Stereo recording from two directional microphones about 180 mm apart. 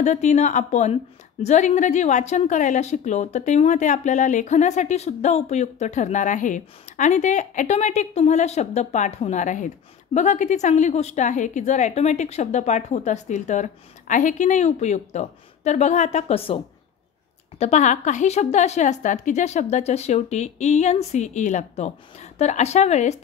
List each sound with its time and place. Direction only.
0.0 s a woman's voice: 40° left (ahead or behind)